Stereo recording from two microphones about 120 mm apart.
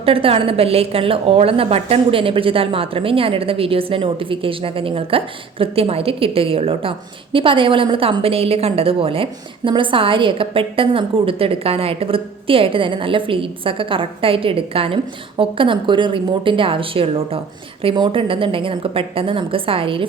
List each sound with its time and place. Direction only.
0.0 s a woman's voice: 50° right (ahead or behind)